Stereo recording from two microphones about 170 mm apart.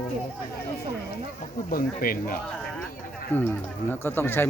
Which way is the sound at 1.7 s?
60° left (ahead or behind).